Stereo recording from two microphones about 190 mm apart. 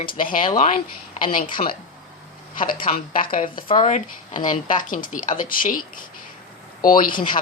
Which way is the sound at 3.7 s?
35° left (ahead or behind).